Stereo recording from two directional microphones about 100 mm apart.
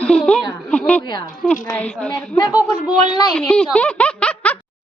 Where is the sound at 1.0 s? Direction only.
45° left (ahead or behind).